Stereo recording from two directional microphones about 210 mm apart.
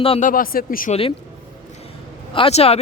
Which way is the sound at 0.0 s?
25° left (ahead or behind).